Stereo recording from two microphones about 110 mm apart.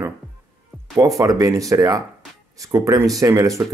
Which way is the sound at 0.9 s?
30° right (ahead or behind).